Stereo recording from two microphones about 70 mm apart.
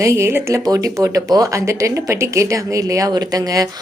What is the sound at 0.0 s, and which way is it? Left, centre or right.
Speech, right.